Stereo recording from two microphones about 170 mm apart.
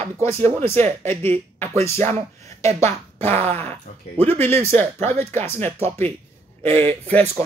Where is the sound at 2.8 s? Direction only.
15° left (ahead or behind).